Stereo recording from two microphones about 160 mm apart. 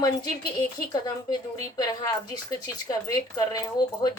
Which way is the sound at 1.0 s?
25° left (ahead or behind).